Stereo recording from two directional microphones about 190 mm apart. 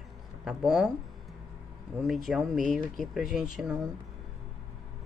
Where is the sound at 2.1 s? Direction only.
Centre (ahead or behind).